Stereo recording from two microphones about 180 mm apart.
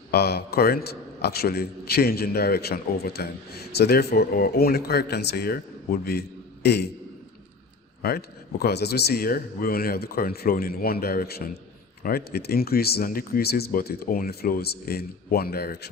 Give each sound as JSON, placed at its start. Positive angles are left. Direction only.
{"t": 0.1, "sound": "a man's voice", "side_deg": 65}
{"t": 8.0, "sound": "a man's voice", "side_deg": 60}